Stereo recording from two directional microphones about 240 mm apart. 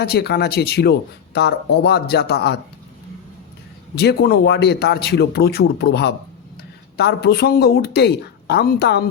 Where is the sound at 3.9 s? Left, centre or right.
Left.